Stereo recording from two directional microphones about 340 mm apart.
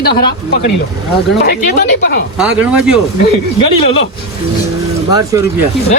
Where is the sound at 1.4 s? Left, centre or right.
Left.